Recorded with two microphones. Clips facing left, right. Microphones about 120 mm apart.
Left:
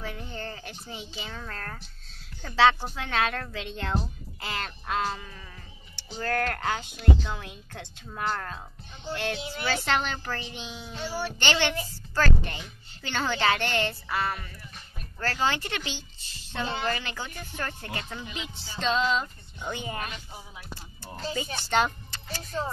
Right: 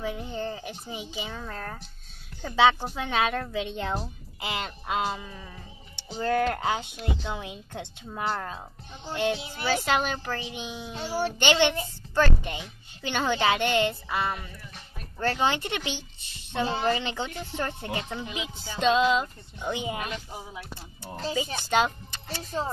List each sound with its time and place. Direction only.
0.0 s a woman's voice: 15° right (ahead or behind)
21.5 s a woman's voice: 15° right (ahead or behind)